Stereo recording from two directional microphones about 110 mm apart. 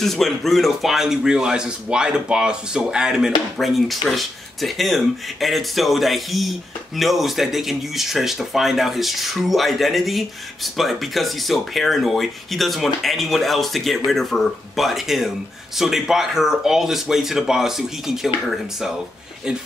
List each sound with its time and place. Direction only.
0.0 s speech: 5° left (ahead or behind)